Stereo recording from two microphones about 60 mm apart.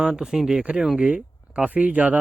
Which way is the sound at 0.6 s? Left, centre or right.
Centre.